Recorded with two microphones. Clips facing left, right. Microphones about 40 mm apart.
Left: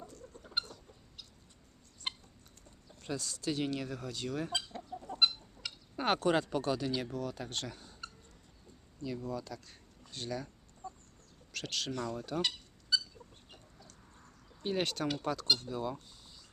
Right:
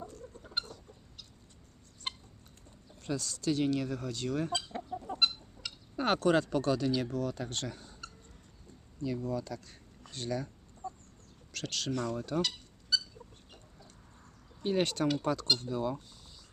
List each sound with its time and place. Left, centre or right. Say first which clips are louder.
0.0 s chicken: right 4 dB; right
2.1 s chicken: even; centre
3.0 s speech: right 3 dB; centre
4.8 s chicken: right 4 dB; centre
5.2 s speech: left 2 dB; centre
9.0 s speech: right 4 dB; centre
10.1 s a sound: right 4 dB; centre
11.5 s speech: even; centre
12.4 s a sound: right 2 dB; centre
14.6 s speech: right 4 dB; centre